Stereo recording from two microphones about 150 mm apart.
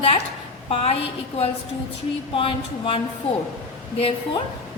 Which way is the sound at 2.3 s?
35° left (ahead or behind).